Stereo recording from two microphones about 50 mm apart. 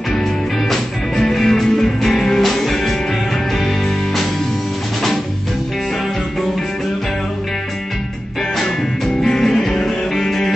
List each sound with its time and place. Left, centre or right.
0.1 s music: centre
8.5 s music: centre